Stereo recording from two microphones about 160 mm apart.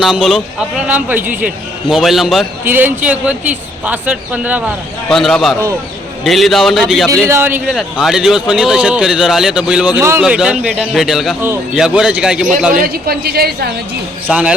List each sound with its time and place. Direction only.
0.0 s a man's voice: centre (ahead or behind)
2.6 s a man's voice: 10° right (ahead or behind)
5.0 s speech: centre (ahead or behind)
7.3 s a man's voice: 15° right (ahead or behind)
7.7 s speech: centre (ahead or behind)
10.0 s a man's voice: 15° right (ahead or behind)
10.2 s speech: 5° right (ahead or behind)
12.8 s a woman's voice: 75° right (ahead or behind)
14.3 s a man's voice: 10° right (ahead or behind)